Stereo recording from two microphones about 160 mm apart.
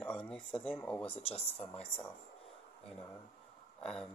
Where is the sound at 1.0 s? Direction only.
40° left (ahead or behind).